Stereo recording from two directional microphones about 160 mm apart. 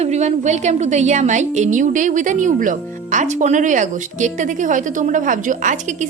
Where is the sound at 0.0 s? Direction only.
45° right (ahead or behind).